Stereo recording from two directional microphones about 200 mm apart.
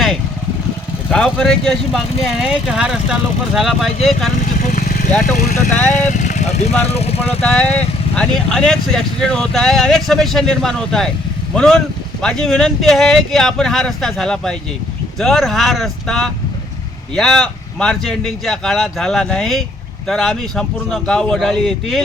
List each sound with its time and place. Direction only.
1.1 s speech: 5° left (ahead or behind)
4.7 s a sound: 40° left (ahead or behind)
5.9 s speech: 35° left (ahead or behind)
7.4 s speech: 5° left (ahead or behind)